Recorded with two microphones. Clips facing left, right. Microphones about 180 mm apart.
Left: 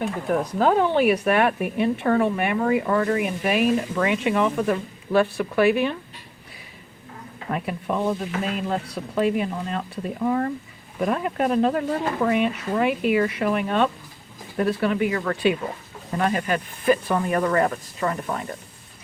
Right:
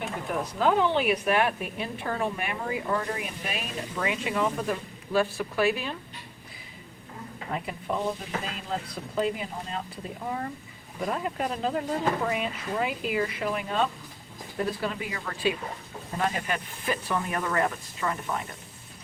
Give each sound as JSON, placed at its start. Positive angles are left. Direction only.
{"t": 0.3, "sound": "speech", "side_deg": 50}
{"t": 7.5, "sound": "speech", "side_deg": 65}
{"t": 16.1, "sound": "speech", "side_deg": 55}